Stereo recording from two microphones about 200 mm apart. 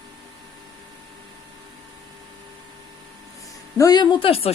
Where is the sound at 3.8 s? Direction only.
20° left (ahead or behind).